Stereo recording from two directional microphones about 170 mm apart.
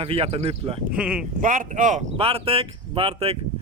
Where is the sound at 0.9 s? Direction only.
5° right (ahead or behind).